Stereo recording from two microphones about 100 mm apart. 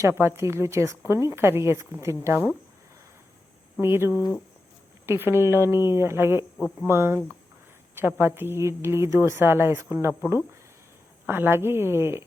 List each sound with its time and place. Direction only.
0.0 s a woman's voice: 25° right (ahead or behind)
3.8 s a woman's voice: 25° right (ahead or behind)
11.3 s a woman's voice: 20° right (ahead or behind)